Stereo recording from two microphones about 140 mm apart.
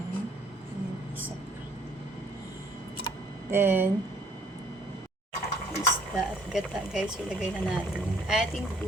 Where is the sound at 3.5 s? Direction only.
15° right (ahead or behind).